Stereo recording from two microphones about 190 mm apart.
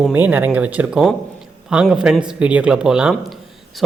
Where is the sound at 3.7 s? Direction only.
Centre (ahead or behind).